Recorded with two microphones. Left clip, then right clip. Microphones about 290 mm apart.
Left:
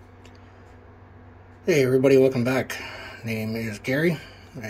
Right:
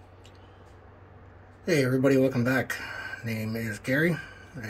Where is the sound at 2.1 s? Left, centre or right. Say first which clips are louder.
Left 6 dB; centre.